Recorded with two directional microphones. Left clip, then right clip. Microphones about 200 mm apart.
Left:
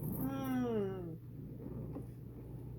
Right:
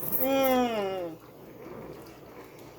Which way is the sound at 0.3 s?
45° right (ahead or behind).